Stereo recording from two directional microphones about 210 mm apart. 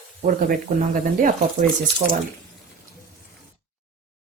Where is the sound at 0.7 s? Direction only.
40° right (ahead or behind).